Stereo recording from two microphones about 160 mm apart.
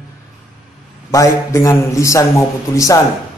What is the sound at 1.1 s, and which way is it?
A man's voice, 20° left (ahead or behind).